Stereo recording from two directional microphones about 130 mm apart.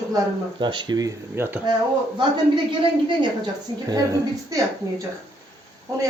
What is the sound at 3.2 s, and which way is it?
Speech, 30° right (ahead or behind).